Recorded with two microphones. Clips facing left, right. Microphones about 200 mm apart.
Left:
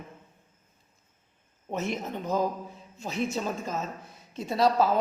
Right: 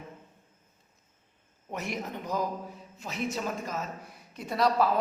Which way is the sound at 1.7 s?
25° left (ahead or behind).